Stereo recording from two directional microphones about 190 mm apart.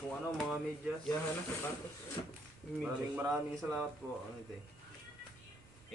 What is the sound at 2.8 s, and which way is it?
Speech, 10° right (ahead or behind).